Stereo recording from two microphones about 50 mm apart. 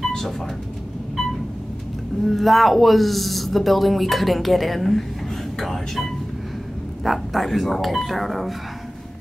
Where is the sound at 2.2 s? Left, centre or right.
Centre.